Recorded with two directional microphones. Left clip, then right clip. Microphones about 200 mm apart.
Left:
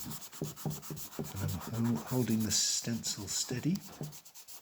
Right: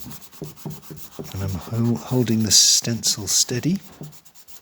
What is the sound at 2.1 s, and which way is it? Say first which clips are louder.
Speech: right 17 dB; 50° right (ahead or behind).